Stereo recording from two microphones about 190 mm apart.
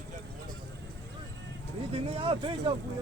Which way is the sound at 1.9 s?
30° right (ahead or behind).